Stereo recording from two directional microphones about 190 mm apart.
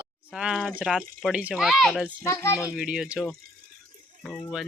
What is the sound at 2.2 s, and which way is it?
Speech, 15° left (ahead or behind).